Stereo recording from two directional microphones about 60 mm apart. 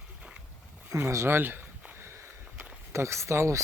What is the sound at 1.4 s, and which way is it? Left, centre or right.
Speech, right.